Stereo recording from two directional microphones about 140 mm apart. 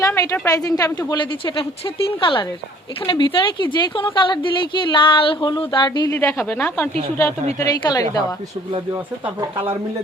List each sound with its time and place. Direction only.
0.0 s a woman's voice: 25° left (ahead or behind)
6.1 s speech: 15° left (ahead or behind)
7.6 s a woman's voice: 25° left (ahead or behind)